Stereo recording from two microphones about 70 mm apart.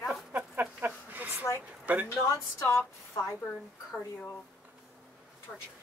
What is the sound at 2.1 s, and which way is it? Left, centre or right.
Speech, left.